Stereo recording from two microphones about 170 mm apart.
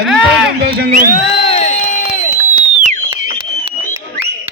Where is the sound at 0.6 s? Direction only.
70° right (ahead or behind).